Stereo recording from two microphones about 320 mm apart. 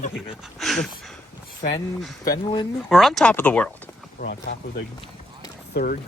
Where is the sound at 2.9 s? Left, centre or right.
Centre.